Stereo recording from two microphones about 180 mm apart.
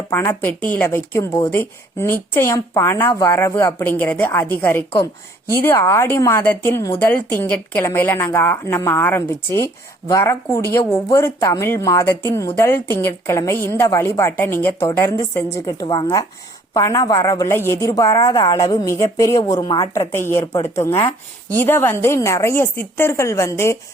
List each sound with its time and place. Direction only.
0.1 s speech: 15° left (ahead or behind)